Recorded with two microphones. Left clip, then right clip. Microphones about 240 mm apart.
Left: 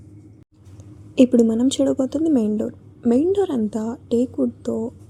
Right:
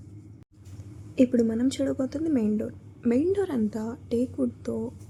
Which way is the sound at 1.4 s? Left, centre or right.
Centre.